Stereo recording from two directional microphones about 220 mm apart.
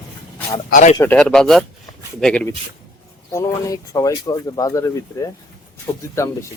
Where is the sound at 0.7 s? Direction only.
35° left (ahead or behind).